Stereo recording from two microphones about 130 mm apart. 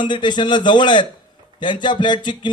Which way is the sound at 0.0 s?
35° left (ahead or behind).